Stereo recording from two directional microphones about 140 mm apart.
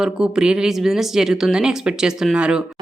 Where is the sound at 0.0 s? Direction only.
5° right (ahead or behind).